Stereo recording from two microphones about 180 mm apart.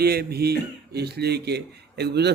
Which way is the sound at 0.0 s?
60° right (ahead or behind).